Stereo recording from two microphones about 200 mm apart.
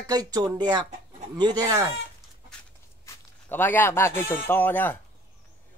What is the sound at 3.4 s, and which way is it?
Speech, 10° left (ahead or behind).